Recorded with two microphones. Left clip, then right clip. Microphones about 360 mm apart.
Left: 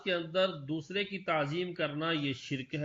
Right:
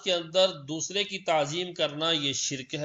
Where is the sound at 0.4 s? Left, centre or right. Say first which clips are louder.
Right 6 dB; right.